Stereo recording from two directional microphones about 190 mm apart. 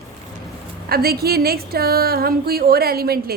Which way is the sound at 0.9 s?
55° right (ahead or behind).